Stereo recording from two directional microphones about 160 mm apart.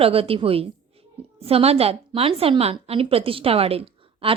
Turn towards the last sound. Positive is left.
turn(degrees=-35)  # may be behind; listen again after turning